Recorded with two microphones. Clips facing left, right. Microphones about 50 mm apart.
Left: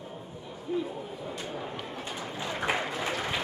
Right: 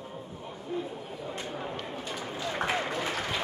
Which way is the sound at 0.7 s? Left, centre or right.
Centre.